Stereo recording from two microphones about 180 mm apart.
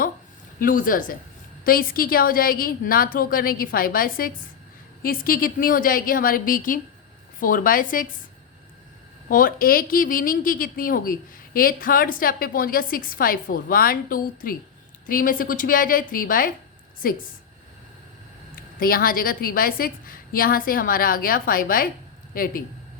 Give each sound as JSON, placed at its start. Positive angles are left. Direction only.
{"t": 0.6, "sound": "speech", "side_deg": 50}
{"t": 9.3, "sound": "speech", "side_deg": 50}
{"t": 18.5, "sound": "speech", "side_deg": 55}